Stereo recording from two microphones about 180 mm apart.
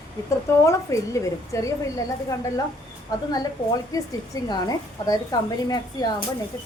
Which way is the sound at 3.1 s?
20° left (ahead or behind).